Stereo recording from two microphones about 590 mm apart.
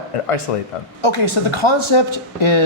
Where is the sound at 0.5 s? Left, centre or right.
Left.